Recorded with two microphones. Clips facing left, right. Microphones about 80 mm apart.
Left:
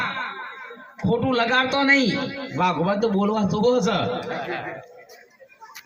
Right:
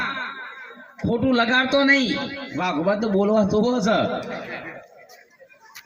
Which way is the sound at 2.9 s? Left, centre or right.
Right.